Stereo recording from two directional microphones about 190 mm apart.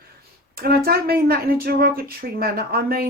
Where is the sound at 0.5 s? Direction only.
55° right (ahead or behind).